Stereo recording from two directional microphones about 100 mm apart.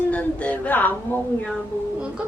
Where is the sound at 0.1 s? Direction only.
15° left (ahead or behind).